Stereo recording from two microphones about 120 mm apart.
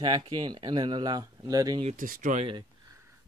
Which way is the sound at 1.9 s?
90° right.